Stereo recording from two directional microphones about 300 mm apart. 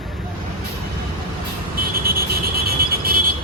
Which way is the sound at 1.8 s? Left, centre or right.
Right.